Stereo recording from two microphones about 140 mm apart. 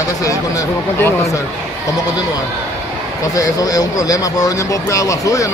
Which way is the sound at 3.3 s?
25° left (ahead or behind).